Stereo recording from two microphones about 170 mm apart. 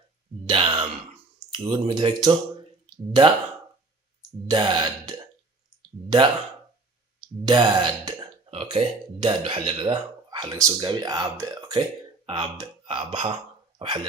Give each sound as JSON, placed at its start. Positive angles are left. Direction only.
{"t": 0.4, "sound": "sigh", "side_deg": -30}
{"t": 1.5, "sound": "speech", "side_deg": -25}
{"t": 4.4, "sound": "speech", "side_deg": -25}